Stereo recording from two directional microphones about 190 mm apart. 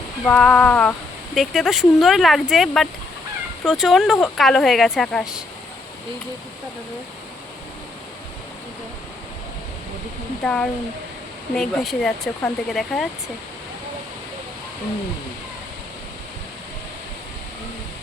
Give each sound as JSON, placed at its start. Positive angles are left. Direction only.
{"t": 0.3, "sound": "a sound", "side_deg": 5}
{"t": 1.4, "sound": "speech", "side_deg": 0}
{"t": 10.4, "sound": "speech", "side_deg": 5}